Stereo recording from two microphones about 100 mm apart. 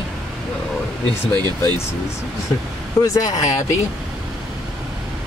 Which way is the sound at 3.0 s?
35° left (ahead or behind).